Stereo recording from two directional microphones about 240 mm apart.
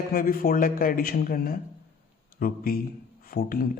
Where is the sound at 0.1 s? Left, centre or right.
Left.